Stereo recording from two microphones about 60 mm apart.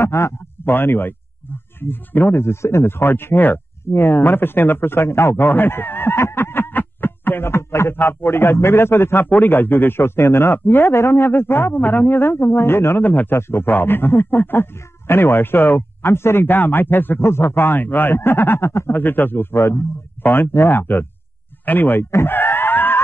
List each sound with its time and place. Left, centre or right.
0.0 s speech: left
0.7 s a man's voice: left
5.5 s a man's voice: left
18.9 s a man's voice: left
22.1 s screaming: left